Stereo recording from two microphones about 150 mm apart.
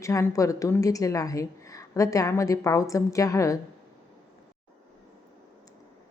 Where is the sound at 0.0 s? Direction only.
20° left (ahead or behind).